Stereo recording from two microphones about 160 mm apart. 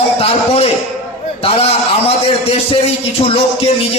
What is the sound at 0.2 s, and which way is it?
A man's voice, 40° left (ahead or behind).